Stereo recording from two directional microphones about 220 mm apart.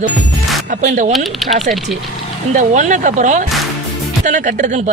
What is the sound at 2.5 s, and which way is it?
A woman's voice, 35° right (ahead or behind).